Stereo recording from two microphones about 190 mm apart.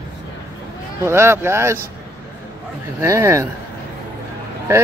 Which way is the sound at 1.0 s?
15° right (ahead or behind).